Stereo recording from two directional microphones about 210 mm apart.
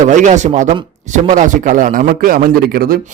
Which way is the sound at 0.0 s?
35° right (ahead or behind).